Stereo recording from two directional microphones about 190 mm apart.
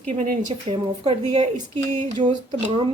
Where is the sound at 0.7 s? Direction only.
25° right (ahead or behind).